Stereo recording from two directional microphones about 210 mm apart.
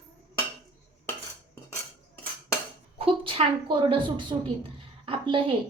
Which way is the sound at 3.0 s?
25° right (ahead or behind).